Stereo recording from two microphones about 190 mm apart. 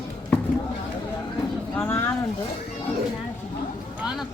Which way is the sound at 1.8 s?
10° left (ahead or behind).